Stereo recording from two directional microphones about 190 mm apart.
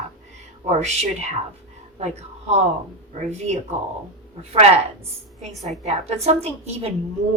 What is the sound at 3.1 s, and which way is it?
Speech, 35° right (ahead or behind).